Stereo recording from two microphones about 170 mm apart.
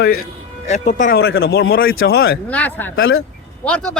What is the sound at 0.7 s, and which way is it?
A man's voice, 50° left (ahead or behind).